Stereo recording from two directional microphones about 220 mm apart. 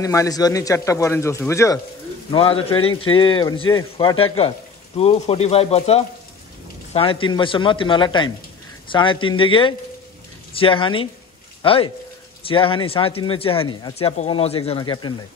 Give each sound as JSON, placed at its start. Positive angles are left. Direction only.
{"t": 0.0, "sound": "a man's voice", "side_deg": 15}
{"t": 2.3, "sound": "speech", "side_deg": 25}